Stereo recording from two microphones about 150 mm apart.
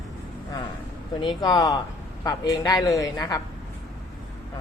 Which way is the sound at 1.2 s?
30° left (ahead or behind).